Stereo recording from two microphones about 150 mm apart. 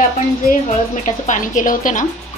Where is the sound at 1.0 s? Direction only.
55° left (ahead or behind).